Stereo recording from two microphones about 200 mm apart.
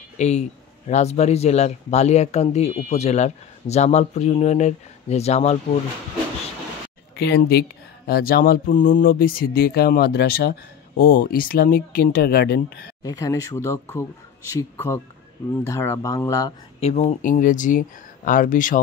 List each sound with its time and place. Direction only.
0.2 s speech: 35° left (ahead or behind)
7.2 s speech: 55° left (ahead or behind)
13.0 s speech: 15° left (ahead or behind)
16.8 s speech: 35° left (ahead or behind)